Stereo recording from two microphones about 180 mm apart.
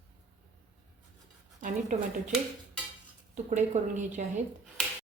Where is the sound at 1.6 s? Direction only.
45° right (ahead or behind).